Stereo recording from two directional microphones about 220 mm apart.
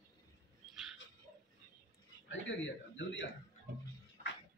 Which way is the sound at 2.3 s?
60° left (ahead or behind).